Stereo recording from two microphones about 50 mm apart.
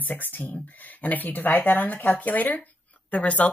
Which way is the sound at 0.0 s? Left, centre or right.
Left.